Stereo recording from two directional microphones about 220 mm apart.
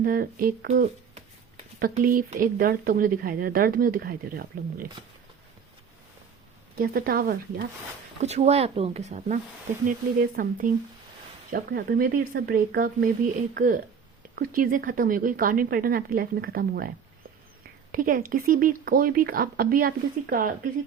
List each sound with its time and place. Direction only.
0.0 s speech: 45° right (ahead or behind)
6.7 s speech: 40° right (ahead or behind)
8.2 s speech: 30° right (ahead or behind)
17.9 s speech: 40° right (ahead or behind)